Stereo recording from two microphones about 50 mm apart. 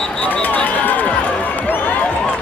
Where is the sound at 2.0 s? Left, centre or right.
Left.